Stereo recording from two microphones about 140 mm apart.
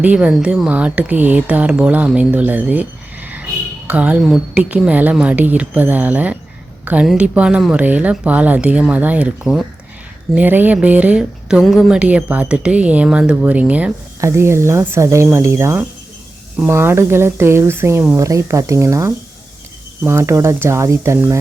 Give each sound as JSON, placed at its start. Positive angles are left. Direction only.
{"t": 0.0, "sound": "speech", "side_deg": -10}